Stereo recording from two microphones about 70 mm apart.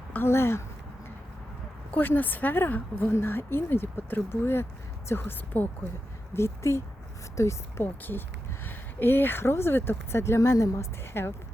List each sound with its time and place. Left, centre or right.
0.1 s speech: left
1.9 s a woman's voice: left
8.6 s speech: left